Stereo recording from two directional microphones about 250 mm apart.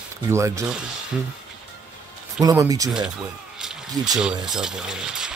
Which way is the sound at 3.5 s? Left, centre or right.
Centre.